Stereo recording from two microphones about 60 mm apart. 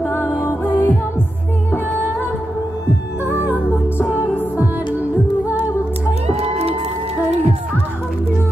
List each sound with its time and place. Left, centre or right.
0.0 s music: left
0.4 s music: left